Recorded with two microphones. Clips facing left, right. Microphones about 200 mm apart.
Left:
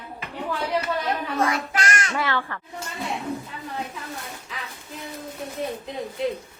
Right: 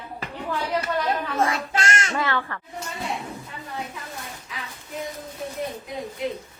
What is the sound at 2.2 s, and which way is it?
Speech, 10° left (ahead or behind).